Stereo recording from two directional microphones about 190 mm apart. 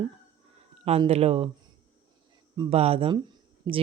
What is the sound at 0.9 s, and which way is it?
Speech, 35° right (ahead or behind).